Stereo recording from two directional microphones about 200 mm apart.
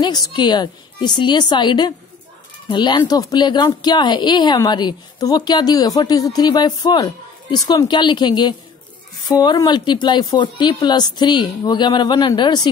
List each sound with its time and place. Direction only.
0.0 s speech: 20° left (ahead or behind)